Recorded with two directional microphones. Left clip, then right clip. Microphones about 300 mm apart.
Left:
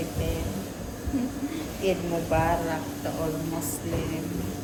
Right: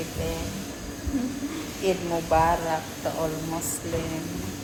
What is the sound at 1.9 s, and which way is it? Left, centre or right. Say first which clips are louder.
Speech: right 2 dB; centre.